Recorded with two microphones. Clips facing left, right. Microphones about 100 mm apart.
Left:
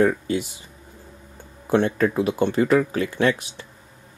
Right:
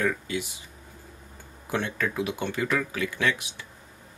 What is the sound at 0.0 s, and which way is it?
Speech, 35° left (ahead or behind).